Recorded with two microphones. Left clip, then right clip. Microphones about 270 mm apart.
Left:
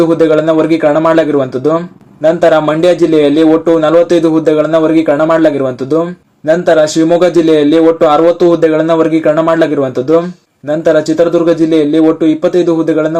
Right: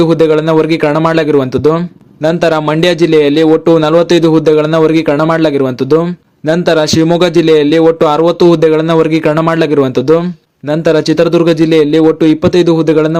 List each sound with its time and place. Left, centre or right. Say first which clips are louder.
0.3 s a man's voice: even; right